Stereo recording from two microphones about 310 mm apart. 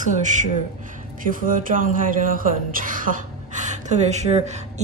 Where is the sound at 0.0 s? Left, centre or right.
Right.